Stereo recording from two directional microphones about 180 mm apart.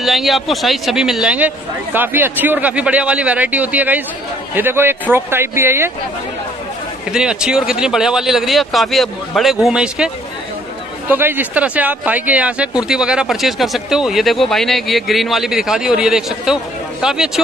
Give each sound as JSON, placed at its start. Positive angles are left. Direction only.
{"t": 0.0, "sound": "a man's voice", "side_deg": 0}
{"t": 7.1, "sound": "a man's voice", "side_deg": -5}